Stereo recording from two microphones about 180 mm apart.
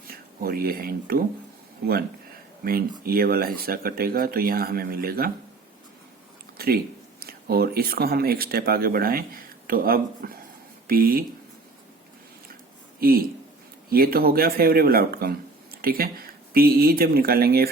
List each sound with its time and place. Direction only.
0.1 s speech: 55° right (ahead or behind)
3.0 s speech: 55° right (ahead or behind)
6.6 s a sound: 60° right (ahead or behind)
7.2 s speech: 60° right (ahead or behind)
13.0 s speech: 55° right (ahead or behind)